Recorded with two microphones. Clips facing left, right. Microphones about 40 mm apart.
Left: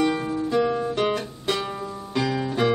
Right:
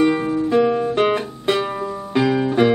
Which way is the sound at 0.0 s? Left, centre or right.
Right.